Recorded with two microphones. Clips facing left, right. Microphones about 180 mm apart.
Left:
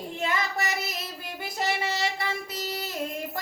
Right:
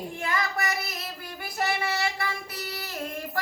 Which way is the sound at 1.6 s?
20° left (ahead or behind).